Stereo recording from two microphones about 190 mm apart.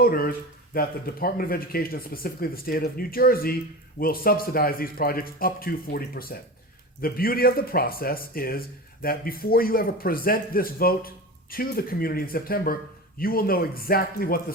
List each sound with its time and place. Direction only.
0.0 s speech: 50° left (ahead or behind)